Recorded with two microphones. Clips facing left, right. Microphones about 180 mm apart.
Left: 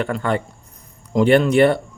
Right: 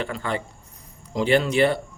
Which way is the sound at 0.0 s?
55° left (ahead or behind).